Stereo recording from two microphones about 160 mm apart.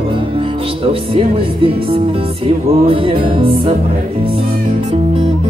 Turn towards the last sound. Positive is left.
turn(degrees=-35)  # may be behind; listen again after turning